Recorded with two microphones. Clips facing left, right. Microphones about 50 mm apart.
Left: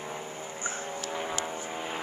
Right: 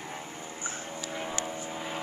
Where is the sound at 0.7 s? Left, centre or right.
Centre.